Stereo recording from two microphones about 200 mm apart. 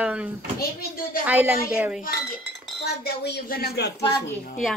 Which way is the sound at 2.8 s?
55° left (ahead or behind).